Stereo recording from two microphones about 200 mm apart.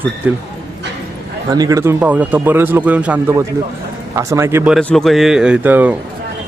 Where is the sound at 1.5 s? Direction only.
15° right (ahead or behind).